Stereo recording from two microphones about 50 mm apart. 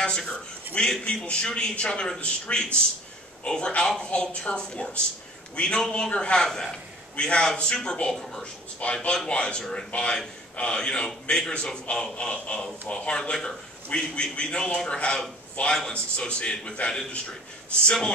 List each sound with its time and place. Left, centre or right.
0.0 s a man's voice: centre